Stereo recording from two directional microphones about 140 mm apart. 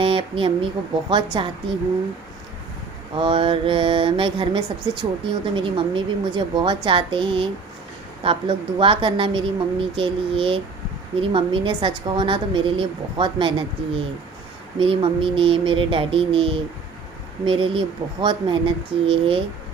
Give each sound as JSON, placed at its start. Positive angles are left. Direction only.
{"t": 0.0, "sound": "speech", "side_deg": -40}
{"t": 1.1, "sound": "mantra", "side_deg": -35}
{"t": 3.2, "sound": "mantra", "side_deg": -35}